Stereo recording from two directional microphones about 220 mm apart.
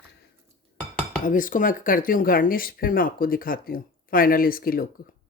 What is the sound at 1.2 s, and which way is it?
Speech, 40° left (ahead or behind).